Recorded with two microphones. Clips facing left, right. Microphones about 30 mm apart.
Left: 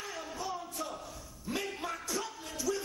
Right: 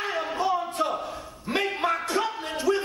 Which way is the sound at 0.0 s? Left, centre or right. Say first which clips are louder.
Right 13 dB; right.